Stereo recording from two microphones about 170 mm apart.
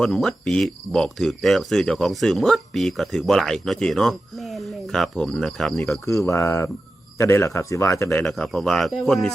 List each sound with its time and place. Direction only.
0.0 s speech: centre (ahead or behind)
6.1 s speech: 20° left (ahead or behind)
8.2 s speech: centre (ahead or behind)